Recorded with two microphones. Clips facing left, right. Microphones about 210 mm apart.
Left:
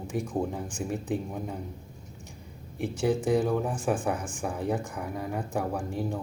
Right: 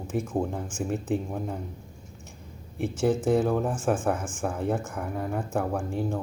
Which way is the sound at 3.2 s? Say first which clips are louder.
Right 2 dB; centre (ahead or behind).